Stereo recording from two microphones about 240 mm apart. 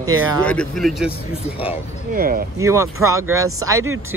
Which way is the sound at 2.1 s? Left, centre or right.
Right.